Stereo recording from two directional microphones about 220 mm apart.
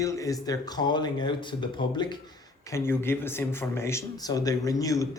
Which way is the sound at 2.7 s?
10° left (ahead or behind).